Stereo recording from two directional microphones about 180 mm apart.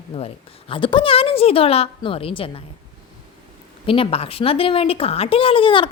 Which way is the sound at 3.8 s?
30° left (ahead or behind).